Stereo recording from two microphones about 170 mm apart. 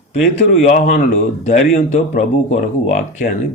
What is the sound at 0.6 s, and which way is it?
Speech, 45° left (ahead or behind).